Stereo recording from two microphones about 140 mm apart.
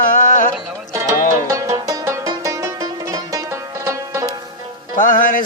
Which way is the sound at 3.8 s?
20° right (ahead or behind).